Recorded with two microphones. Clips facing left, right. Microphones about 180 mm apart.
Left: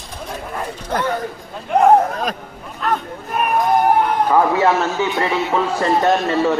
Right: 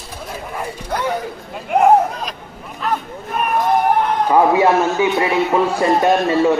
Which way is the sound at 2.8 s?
Centre (ahead or behind).